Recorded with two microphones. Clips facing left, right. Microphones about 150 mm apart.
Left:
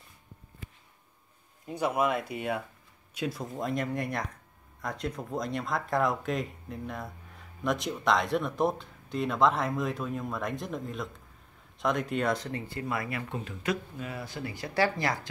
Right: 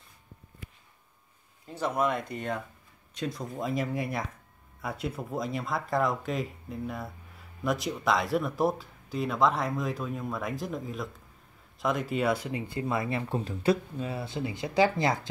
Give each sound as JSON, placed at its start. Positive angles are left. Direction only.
{"t": 1.7, "sound": "speech", "side_deg": 10}